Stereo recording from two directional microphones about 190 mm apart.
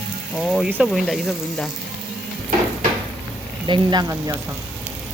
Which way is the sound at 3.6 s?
25° right (ahead or behind).